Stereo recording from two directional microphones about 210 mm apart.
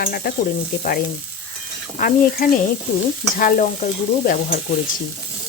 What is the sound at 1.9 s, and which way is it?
Sizzle, 40° left (ahead or behind).